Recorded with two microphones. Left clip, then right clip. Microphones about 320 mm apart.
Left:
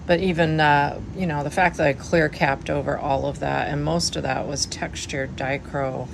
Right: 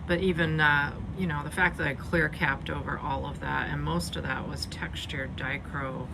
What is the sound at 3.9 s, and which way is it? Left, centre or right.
Speech, left.